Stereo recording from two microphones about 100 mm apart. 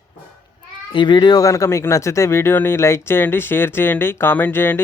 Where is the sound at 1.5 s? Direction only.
30° left (ahead or behind).